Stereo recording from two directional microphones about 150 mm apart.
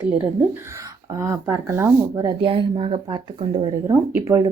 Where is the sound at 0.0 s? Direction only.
15° right (ahead or behind).